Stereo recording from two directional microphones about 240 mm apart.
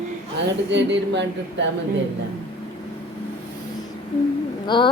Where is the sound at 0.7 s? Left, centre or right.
Right.